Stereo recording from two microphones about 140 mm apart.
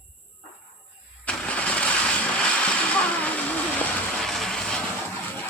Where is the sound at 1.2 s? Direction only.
10° left (ahead or behind).